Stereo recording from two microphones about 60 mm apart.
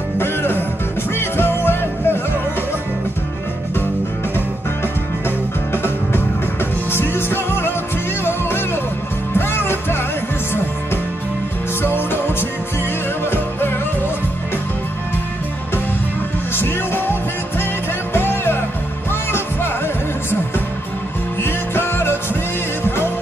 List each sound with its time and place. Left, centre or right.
0.2 s music: left
6.9 s music: left
13.2 s music: left
16.5 s music: left
21.4 s music: left